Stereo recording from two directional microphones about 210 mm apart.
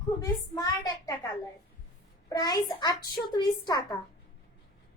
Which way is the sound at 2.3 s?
20° left (ahead or behind).